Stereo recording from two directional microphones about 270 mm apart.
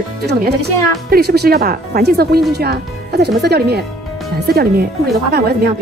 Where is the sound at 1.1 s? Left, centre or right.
Right.